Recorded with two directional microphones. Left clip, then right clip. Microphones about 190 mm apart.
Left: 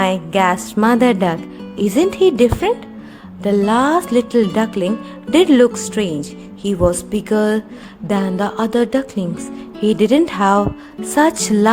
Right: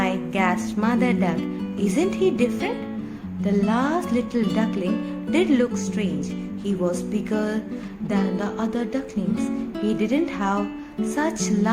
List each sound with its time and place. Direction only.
0.0 s speech: 40° left (ahead or behind)